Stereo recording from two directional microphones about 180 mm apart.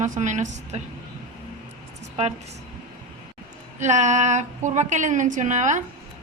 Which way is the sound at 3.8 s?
40° right (ahead or behind).